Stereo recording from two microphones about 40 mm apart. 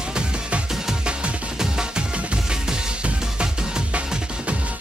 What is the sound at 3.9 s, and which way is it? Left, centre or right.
Music, right.